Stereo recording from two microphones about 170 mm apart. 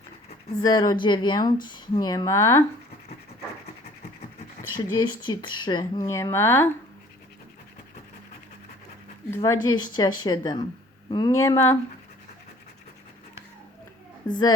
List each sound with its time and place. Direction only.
0.6 s a woman's voice: 25° left (ahead or behind)
4.8 s a woman's voice: 25° left (ahead or behind)
9.3 s a woman's voice: 15° left (ahead or behind)
14.3 s a woman's voice: 25° left (ahead or behind)